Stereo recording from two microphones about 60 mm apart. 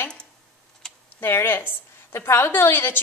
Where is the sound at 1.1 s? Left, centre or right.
Left.